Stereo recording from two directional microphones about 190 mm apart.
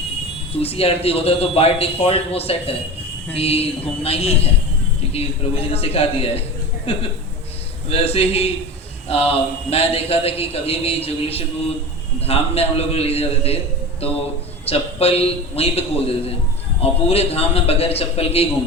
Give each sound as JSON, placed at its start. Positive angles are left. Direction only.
{"t": 0.6, "sound": "a man's voice", "side_deg": 30}
{"t": 14.6, "sound": "a man's voice", "side_deg": 30}